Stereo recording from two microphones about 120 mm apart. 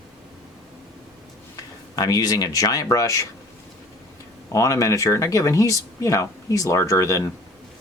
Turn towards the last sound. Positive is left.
turn(degrees=25)  # may be behind; listen again after turning